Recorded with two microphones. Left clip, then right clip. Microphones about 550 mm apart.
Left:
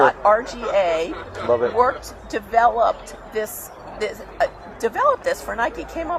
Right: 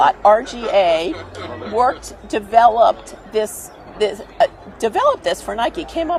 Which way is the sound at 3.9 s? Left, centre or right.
Right.